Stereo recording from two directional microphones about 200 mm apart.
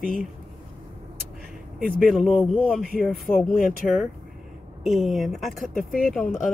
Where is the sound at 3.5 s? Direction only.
45° left (ahead or behind).